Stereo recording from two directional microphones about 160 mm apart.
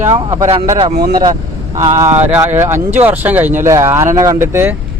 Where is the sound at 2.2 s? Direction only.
10° right (ahead or behind).